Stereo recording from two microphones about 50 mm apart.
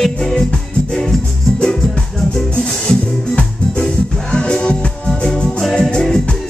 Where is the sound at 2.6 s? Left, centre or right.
Centre.